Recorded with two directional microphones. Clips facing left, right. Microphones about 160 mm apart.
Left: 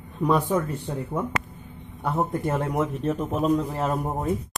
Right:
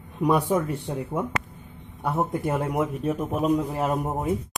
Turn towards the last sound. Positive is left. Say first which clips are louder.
# even
turn(degrees=-5)  # may be behind; listen again after turning